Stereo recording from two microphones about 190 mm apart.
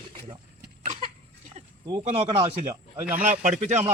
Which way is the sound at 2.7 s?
10° right (ahead or behind).